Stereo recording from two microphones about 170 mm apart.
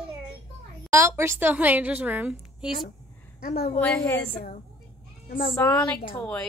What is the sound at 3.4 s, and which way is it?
Speech, 65° left (ahead or behind).